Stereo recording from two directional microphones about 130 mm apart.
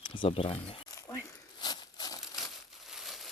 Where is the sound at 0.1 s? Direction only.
40° left (ahead or behind).